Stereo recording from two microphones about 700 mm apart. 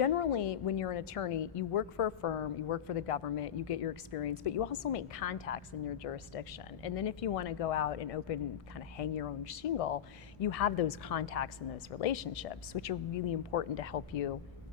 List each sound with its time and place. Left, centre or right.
0.0 s a woman's voice: left